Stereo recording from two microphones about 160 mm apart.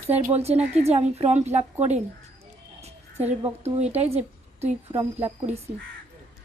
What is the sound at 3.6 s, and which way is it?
Speech, 40° right (ahead or behind).